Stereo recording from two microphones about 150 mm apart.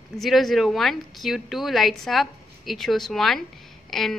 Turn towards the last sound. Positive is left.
turn(degrees=0)  # may be behind; listen again after turning